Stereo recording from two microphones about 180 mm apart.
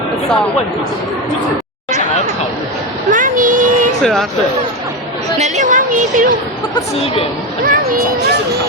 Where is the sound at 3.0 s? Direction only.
45° right (ahead or behind).